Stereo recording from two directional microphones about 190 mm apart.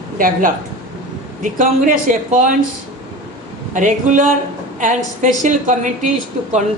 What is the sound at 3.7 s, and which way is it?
A woman's voice, 40° right (ahead or behind).